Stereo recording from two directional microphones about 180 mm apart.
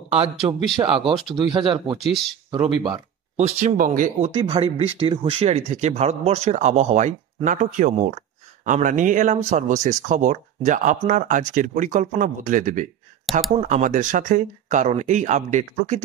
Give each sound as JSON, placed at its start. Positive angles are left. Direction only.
{"t": 0.4, "sound": "a man's voice", "side_deg": -15}
{"t": 0.7, "sound": "speech", "side_deg": -30}
{"t": 2.0, "sound": "speech", "side_deg": 0}
{"t": 2.5, "sound": "speech", "side_deg": -25}
{"t": 3.3, "sound": "speech", "side_deg": -40}
{"t": 4.4, "sound": "speech", "side_deg": -30}
{"t": 13.2, "sound": "a sound", "side_deg": 0}
{"t": 13.6, "sound": "speech", "side_deg": -45}